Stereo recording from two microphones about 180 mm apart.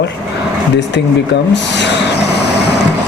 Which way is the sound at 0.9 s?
70° left (ahead or behind).